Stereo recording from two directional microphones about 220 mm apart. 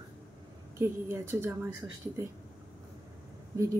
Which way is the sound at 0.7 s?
10° right (ahead or behind).